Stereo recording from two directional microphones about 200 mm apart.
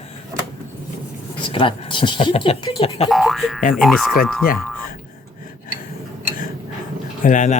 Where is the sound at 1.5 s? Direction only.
25° left (ahead or behind).